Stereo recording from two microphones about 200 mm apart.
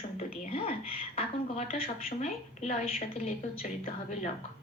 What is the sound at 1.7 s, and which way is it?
Speech, 40° left (ahead or behind).